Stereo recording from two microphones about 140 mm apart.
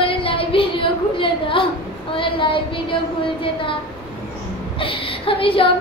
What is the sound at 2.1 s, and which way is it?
Speech, 35° left (ahead or behind).